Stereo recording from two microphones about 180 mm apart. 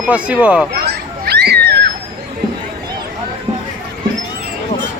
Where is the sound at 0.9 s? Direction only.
60° right (ahead or behind).